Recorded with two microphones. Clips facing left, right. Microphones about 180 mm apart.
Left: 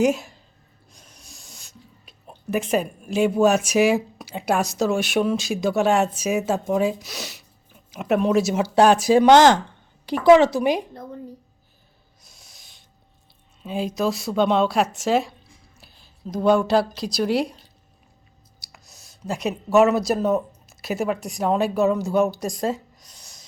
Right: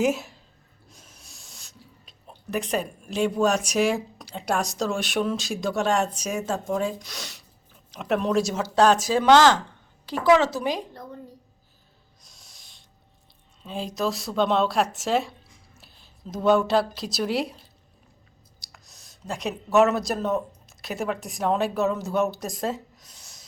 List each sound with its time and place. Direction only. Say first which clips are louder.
0.0 s speech: left 3 dB; centre (ahead or behind); by 11.0 s 15° left (ahead or behind)
12.2 s owl: left 3 dB; centre (ahead or behind)
13.6 s speech: left 4 dB; 5° left (ahead or behind)
18.6 s speech: left 3 dB; 5° left (ahead or behind)